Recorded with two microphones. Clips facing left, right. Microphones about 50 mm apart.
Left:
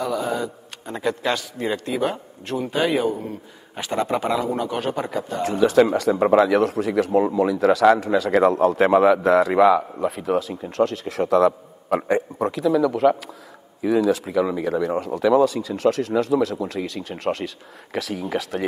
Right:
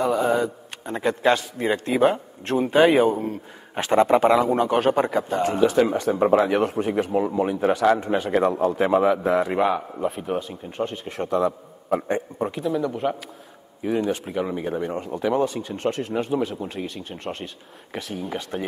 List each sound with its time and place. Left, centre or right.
0.0 s a man's voice: right
5.7 s a man's voice: left